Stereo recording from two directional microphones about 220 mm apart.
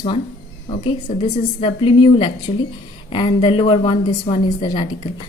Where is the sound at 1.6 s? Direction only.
25° left (ahead or behind).